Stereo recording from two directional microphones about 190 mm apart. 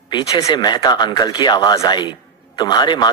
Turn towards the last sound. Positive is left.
turn(degrees=20)  # may be behind; listen again after turning